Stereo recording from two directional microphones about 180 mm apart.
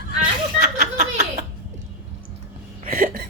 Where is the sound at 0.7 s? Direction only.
40° right (ahead or behind).